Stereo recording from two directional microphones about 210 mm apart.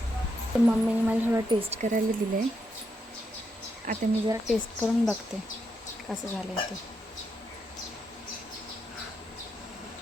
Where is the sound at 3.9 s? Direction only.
40° right (ahead or behind).